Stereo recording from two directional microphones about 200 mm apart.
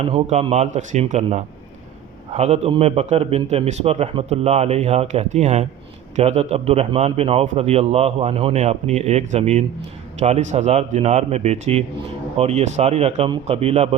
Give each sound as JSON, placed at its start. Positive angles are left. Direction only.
{"t": 0.0, "sound": "a man's voice", "side_deg": -30}